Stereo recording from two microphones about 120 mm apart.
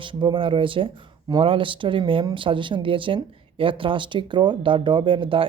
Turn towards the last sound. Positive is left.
turn(degrees=-45)  # may be behind; listen again after turning